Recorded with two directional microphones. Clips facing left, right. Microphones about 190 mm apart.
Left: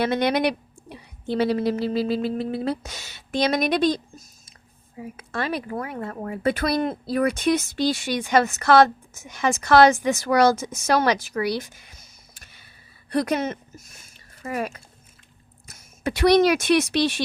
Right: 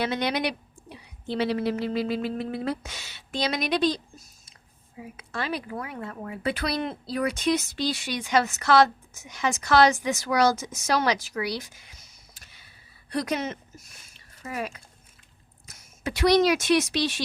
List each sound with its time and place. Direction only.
0.0 s speech: 55° left (ahead or behind)